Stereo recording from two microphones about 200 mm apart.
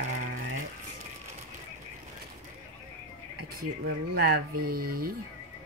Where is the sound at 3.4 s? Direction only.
50° right (ahead or behind).